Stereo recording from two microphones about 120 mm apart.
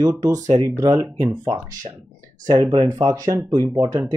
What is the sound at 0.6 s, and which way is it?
Speech, 30° right (ahead or behind).